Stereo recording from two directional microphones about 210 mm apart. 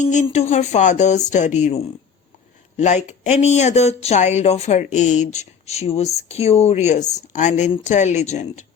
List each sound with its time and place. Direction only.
0.0 s speech: 35° left (ahead or behind)